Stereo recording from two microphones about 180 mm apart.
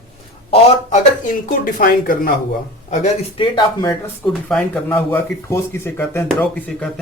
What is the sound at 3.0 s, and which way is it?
Speech, 30° left (ahead or behind).